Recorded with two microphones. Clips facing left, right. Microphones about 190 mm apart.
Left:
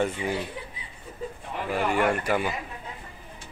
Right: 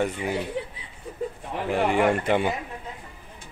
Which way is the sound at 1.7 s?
20° right (ahead or behind).